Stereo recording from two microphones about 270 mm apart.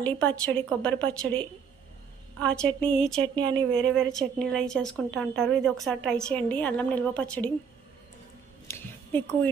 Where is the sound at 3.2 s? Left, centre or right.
Centre.